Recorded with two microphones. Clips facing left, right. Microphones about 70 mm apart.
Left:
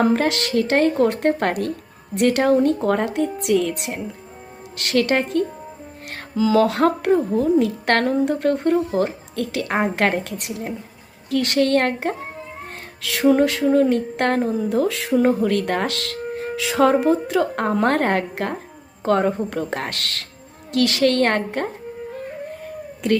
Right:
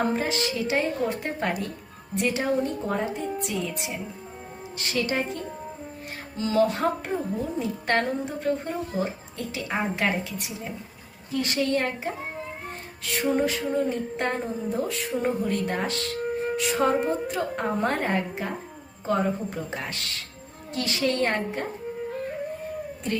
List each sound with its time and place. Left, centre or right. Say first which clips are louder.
0.0 s a woman's voice: left 7 dB; left
6.6 s a woman's voice: left 3 dB; left
13.0 s a sound: left 8 dB; left
17.5 s a woman's voice: left 7 dB; left